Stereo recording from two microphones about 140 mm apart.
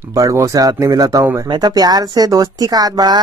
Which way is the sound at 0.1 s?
25° right (ahead or behind).